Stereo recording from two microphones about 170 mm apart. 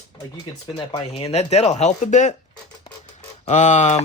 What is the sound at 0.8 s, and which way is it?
Speech, 30° left (ahead or behind).